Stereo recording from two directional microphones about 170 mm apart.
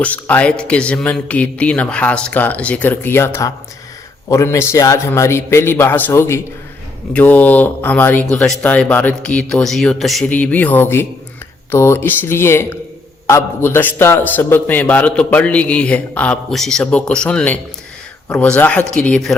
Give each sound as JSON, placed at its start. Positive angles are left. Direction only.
{"t": 0.0, "sound": "a man's voice", "side_deg": 10}